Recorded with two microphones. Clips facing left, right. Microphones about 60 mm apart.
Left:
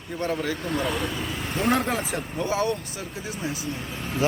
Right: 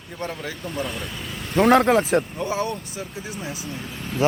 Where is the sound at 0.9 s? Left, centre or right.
Left.